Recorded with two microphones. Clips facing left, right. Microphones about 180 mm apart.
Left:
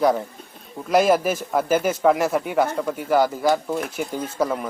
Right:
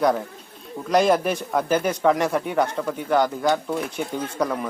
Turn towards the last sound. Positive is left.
turn(degrees=5)  # may be behind; listen again after turning